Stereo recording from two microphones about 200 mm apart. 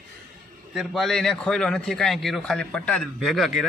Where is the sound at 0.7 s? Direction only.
Centre (ahead or behind).